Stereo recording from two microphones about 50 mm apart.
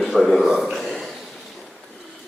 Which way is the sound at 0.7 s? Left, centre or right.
Centre.